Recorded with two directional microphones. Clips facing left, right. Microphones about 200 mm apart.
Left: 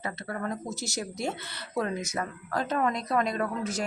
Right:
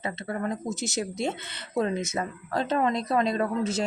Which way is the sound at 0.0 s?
20° right (ahead or behind).